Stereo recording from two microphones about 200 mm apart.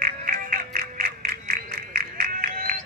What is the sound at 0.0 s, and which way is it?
Music, 45° right (ahead or behind).